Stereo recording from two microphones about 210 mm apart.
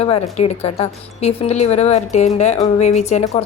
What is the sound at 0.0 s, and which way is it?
Speech, 30° left (ahead or behind).